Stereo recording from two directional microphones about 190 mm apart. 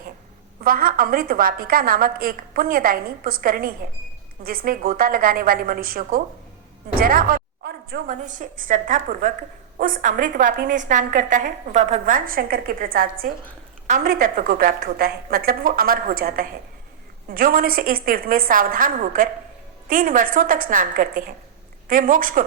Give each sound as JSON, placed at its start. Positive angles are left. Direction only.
{"t": 0.6, "sound": "a woman's voice", "side_deg": -50}
{"t": 7.0, "sound": "a sound", "side_deg": -50}
{"t": 8.2, "sound": "a woman's voice", "side_deg": -40}